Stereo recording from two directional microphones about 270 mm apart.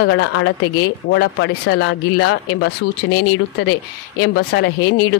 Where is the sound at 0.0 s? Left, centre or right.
Left.